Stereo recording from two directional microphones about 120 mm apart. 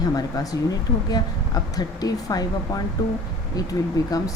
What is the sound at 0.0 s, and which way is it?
Speech, 30° left (ahead or behind).